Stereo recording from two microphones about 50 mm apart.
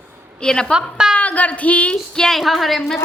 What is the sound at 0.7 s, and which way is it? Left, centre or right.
Speech, centre.